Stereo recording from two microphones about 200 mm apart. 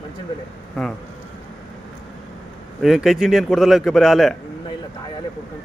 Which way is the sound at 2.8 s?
Centre (ahead or behind).